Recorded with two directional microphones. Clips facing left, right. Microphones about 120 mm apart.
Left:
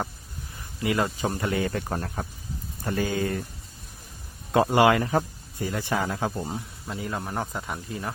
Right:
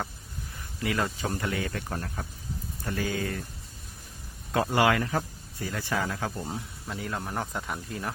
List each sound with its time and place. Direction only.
0.8 s speech: 15° left (ahead or behind)
1.4 s speech: 30° left (ahead or behind)
4.5 s speech: 20° left (ahead or behind)
6.4 s speech: 10° left (ahead or behind)